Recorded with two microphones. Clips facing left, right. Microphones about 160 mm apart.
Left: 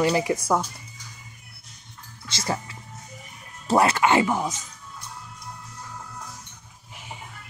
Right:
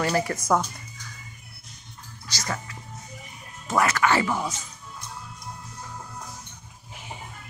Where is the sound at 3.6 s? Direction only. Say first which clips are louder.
Left 3 dB; 30° left (ahead or behind).